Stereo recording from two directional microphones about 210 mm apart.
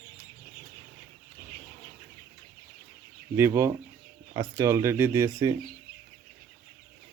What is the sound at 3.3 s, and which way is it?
Speech, 10° right (ahead or behind).